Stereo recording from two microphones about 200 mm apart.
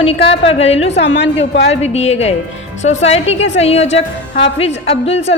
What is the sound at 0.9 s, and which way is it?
Speech, 60° left (ahead or behind).